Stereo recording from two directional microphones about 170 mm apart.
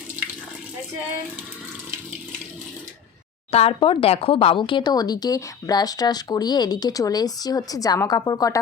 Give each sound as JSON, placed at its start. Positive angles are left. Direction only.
{"t": 3.5, "sound": "speech", "side_deg": 35}